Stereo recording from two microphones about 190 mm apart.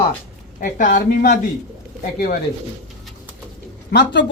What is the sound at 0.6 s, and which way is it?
Speech, 45° left (ahead or behind).